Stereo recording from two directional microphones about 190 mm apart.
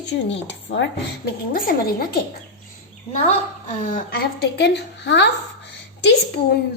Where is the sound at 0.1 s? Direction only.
70° left (ahead or behind).